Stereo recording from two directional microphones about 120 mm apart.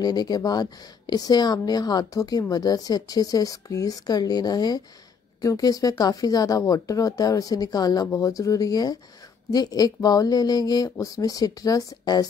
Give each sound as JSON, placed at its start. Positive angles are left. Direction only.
{"t": 0.0, "sound": "speech", "side_deg": 35}